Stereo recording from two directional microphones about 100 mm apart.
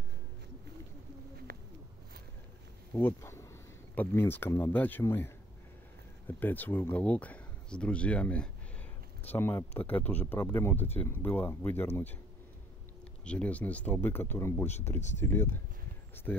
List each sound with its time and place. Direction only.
2.9 s speech: 20° left (ahead or behind)
9.3 s speech: 25° left (ahead or behind)
13.2 s speech: 10° left (ahead or behind)